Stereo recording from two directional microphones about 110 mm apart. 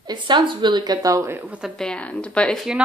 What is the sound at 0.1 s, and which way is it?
A woman's voice, 45° right (ahead or behind).